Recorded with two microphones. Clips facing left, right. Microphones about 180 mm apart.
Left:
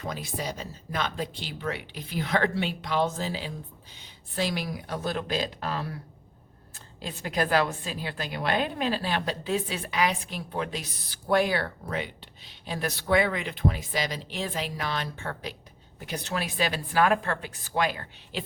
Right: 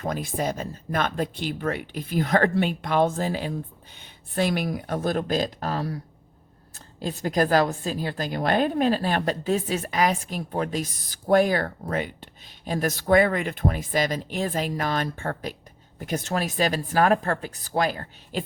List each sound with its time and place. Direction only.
0.0 s speech: 50° right (ahead or behind)